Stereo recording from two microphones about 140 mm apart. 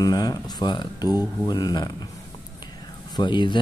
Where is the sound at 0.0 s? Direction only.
25° left (ahead or behind).